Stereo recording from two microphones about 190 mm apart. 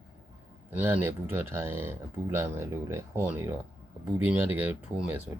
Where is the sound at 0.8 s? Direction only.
10° right (ahead or behind).